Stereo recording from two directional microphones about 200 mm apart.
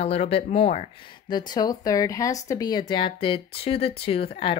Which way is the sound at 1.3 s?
20° left (ahead or behind).